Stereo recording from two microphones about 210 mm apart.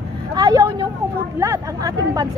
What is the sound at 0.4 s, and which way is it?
Vehicle, 20° right (ahead or behind).